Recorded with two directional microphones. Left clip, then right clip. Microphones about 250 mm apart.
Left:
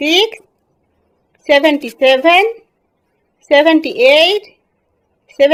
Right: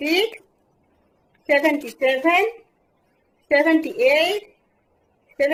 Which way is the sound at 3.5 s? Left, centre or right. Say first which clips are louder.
Left 8 dB; left.